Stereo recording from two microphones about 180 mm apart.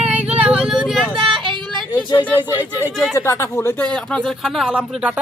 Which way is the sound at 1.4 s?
25° right (ahead or behind).